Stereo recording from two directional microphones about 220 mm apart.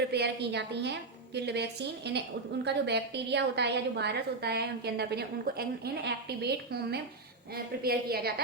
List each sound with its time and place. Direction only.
0.1 s a woman's voice: 50° right (ahead or behind)